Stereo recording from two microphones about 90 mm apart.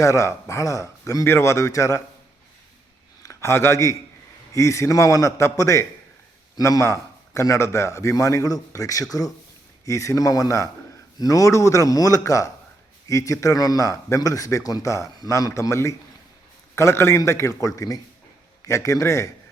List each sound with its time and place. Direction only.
0.0 s speech: 35° left (ahead or behind)
3.2 s speech: 30° left (ahead or behind)